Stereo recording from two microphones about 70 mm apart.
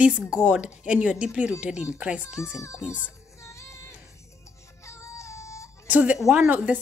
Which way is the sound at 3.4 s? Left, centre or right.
Left.